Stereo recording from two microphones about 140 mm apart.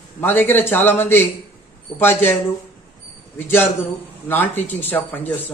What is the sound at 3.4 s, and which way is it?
Speech, 15° left (ahead or behind).